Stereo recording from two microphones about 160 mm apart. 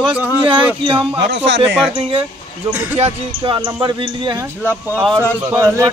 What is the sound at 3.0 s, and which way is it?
Speech, 35° right (ahead or behind).